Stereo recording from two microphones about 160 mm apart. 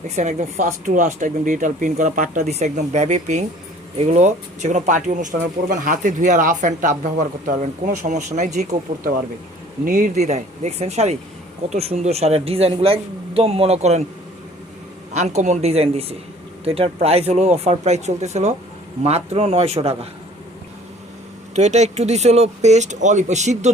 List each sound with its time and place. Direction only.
0.2 s speech: 45° right (ahead or behind)
15.1 s speech: 45° right (ahead or behind)
21.5 s speech: 45° right (ahead or behind)